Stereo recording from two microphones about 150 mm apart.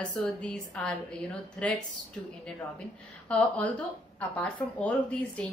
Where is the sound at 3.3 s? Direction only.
10° left (ahead or behind).